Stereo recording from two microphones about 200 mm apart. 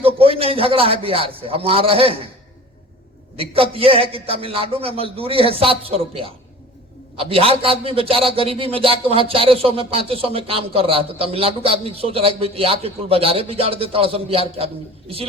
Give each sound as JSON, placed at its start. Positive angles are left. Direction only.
{"t": 0.0, "sound": "a man's voice", "side_deg": -30}
{"t": 3.3, "sound": "a man's voice", "side_deg": -30}